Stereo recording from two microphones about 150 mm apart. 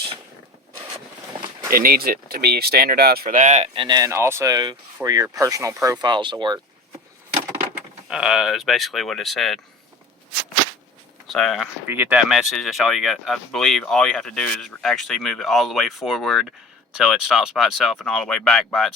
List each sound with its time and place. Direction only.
1.7 s speech: 75° right (ahead or behind)
3.3 s speech: 50° right (ahead or behind)
3.8 s speech: 30° right (ahead or behind)
8.0 s speech: 5° right (ahead or behind)
11.3 s speech: centre (ahead or behind)
11.9 s speech: 15° right (ahead or behind)